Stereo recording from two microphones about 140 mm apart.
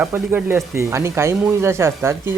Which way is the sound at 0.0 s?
10° right (ahead or behind).